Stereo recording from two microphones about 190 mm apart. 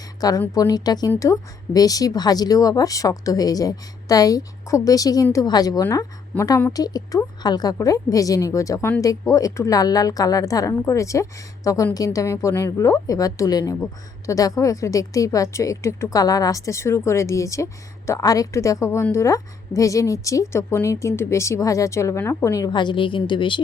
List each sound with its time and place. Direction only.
0.2 s a woman's voice: 20° left (ahead or behind)